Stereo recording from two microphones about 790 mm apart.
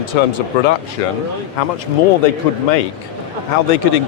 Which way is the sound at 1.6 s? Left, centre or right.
Left.